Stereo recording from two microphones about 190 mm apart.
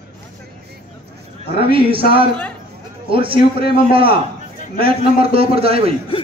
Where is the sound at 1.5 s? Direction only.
30° right (ahead or behind).